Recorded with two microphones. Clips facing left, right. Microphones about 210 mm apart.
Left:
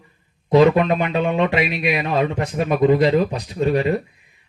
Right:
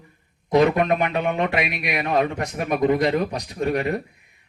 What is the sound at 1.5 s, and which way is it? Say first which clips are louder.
Speech: left 4 dB; 25° left (ahead or behind).